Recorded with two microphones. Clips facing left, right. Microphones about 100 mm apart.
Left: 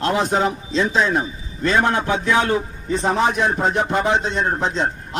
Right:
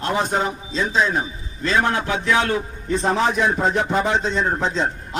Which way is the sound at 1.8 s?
25° left (ahead or behind).